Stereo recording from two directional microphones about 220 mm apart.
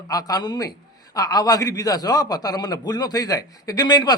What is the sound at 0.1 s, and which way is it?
A man's voice, 15° left (ahead or behind).